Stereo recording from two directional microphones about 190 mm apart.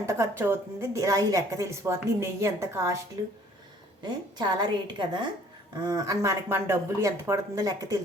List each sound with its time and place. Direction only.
0.0 s speech: 15° right (ahead or behind)
4.0 s a woman's voice: 20° right (ahead or behind)